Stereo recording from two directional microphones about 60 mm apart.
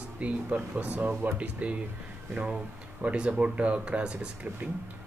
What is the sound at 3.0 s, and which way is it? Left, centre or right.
Speech, right.